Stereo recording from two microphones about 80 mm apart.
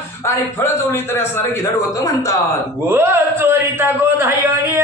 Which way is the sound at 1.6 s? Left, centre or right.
Left.